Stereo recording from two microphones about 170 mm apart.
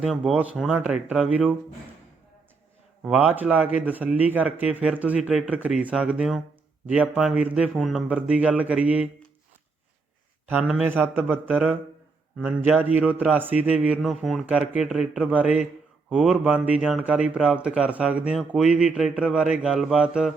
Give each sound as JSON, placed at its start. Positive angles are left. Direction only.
{"t": 0.0, "sound": "speech", "side_deg": -5}
{"t": 3.0, "sound": "speech", "side_deg": -5}
{"t": 10.5, "sound": "a man's voice", "side_deg": -5}